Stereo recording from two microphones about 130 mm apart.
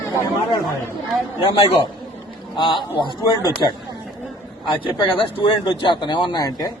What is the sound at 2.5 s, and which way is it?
Speech, 35° left (ahead or behind).